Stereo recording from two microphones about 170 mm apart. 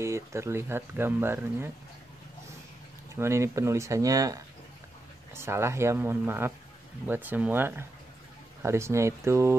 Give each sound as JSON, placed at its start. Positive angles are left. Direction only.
{"t": 0.0, "sound": "speech", "side_deg": -15}
{"t": 3.2, "sound": "speech", "side_deg": -15}